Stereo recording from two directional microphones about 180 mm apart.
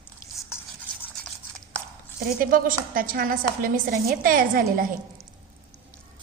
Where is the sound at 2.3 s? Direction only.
50° right (ahead or behind).